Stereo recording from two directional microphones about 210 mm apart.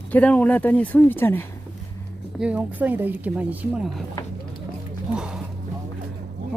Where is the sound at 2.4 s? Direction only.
5° right (ahead or behind).